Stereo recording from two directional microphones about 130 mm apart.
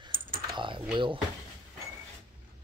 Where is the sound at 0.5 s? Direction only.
40° right (ahead or behind).